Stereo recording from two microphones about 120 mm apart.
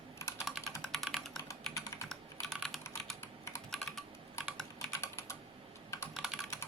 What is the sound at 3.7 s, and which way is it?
Typing, centre (ahead or behind).